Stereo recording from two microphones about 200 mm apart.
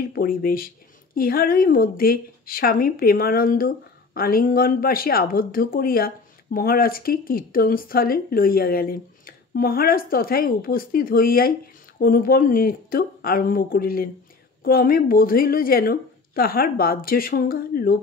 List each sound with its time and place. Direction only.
0.1 s a woman's voice: 45° left (ahead or behind)